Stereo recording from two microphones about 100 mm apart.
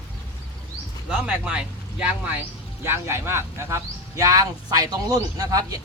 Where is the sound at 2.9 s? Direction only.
25° right (ahead or behind).